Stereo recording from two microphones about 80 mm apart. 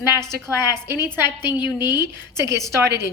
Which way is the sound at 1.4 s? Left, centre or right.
Left.